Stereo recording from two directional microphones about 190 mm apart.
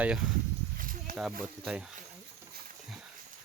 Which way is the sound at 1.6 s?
5° right (ahead or behind).